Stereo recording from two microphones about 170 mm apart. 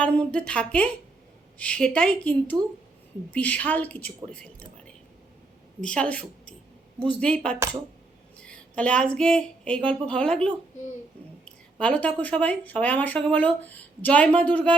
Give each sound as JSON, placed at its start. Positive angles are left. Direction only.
{"t": 0.0, "sound": "speech", "side_deg": 5}
{"t": 5.8, "sound": "a woman's voice", "side_deg": 5}